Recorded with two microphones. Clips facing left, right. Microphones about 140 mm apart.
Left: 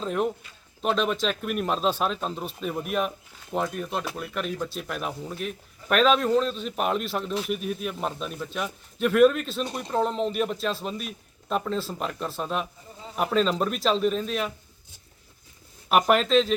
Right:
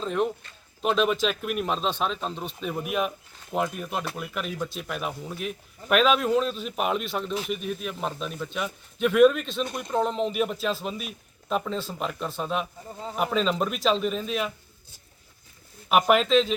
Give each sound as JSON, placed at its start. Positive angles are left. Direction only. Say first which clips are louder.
{"t": 0.0, "sound": "speech", "louder": "even", "side_deg": 5}
{"t": 9.6, "sound": "speech", "louder": "even", "side_deg": 35}
{"t": 9.9, "sound": "speech", "louder": "even", "side_deg": 0}
{"t": 15.9, "sound": "speech", "louder": "even", "side_deg": 0}